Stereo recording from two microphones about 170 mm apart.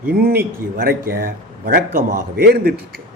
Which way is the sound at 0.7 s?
60° right (ahead or behind).